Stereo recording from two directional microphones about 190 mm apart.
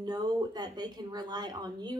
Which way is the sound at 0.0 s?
20° right (ahead or behind).